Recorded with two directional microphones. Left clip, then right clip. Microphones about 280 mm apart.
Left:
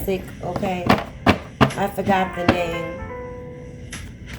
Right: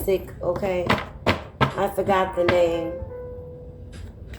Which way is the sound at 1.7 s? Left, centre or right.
Centre.